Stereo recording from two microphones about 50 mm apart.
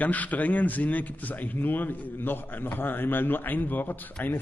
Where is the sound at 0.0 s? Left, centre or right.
Left.